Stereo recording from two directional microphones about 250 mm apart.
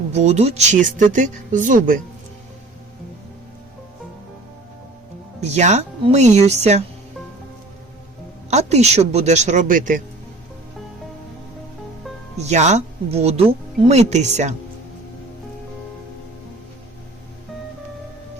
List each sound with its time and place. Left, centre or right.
0.1 s speech: right
5.4 s speech: right
8.4 s speech: right
12.4 s speech: right